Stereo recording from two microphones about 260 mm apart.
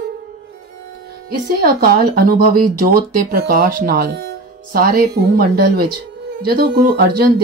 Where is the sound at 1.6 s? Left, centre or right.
Right.